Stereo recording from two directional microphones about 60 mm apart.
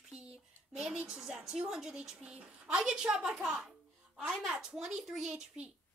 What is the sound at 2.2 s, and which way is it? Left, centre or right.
Speech, right.